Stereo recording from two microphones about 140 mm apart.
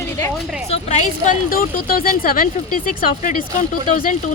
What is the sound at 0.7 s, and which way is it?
Speech, 55° left (ahead or behind).